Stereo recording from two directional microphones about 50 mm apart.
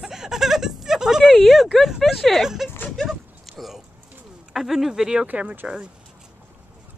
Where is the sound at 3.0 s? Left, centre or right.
Centre.